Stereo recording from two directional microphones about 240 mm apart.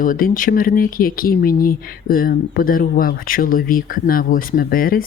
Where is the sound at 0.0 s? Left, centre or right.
Left.